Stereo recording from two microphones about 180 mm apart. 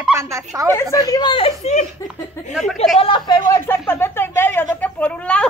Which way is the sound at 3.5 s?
10° left (ahead or behind).